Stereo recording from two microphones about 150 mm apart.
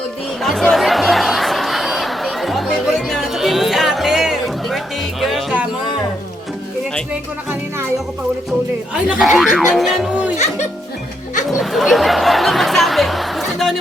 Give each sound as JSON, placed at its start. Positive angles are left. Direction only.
{"t": 0.4, "sound": "music", "side_deg": 0}
{"t": 8.9, "sound": "speech", "side_deg": -5}
{"t": 11.4, "sound": "speech", "side_deg": 0}